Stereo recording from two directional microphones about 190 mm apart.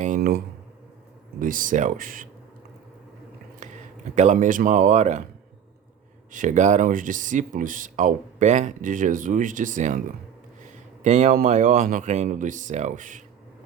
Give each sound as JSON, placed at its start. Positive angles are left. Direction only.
{"t": 0.2, "sound": "speech", "side_deg": -55}
{"t": 1.4, "sound": "speech", "side_deg": -45}
{"t": 3.6, "sound": "a sound", "side_deg": -40}
{"t": 4.1, "sound": "speech", "side_deg": -40}
{"t": 6.3, "sound": "speech", "side_deg": -40}
{"t": 11.0, "sound": "speech", "side_deg": -40}